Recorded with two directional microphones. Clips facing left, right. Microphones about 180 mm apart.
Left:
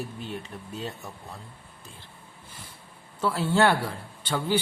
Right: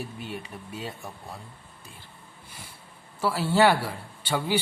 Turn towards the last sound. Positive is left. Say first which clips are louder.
# even
turn(degrees=-10)  # may be behind; listen again after turning